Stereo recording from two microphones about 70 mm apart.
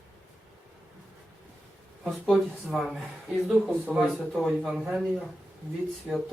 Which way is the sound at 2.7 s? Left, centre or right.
Centre.